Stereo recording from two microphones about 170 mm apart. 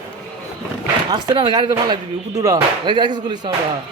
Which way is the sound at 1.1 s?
25° right (ahead or behind).